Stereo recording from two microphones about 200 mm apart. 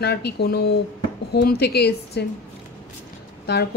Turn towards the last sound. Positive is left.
turn(degrees=55)  # may be behind; listen again after turning